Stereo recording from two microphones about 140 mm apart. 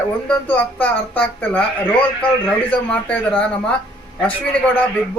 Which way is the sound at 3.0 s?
10° left (ahead or behind).